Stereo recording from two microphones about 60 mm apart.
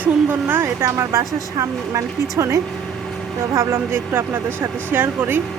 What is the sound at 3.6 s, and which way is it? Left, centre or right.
Speech, right.